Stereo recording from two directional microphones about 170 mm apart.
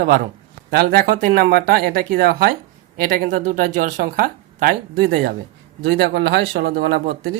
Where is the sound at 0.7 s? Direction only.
65° right (ahead or behind).